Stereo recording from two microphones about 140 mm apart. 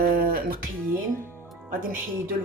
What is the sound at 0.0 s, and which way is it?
Music, 90° right.